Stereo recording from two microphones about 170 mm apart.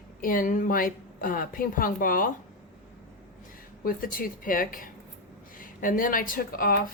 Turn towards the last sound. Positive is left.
turn(degrees=55)  # may be behind; listen again after turning